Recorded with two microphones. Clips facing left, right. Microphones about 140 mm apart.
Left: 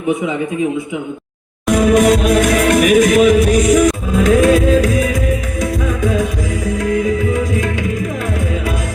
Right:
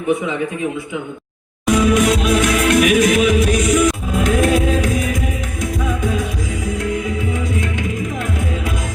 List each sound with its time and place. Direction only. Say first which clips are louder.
1.7 s music: left 4 dB; 50° left (ahead or behind)